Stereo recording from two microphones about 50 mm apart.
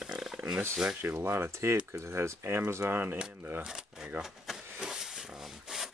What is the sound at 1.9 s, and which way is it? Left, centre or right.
Speech, right.